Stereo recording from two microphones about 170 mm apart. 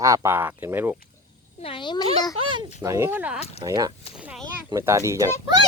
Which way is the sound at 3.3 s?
40° left (ahead or behind).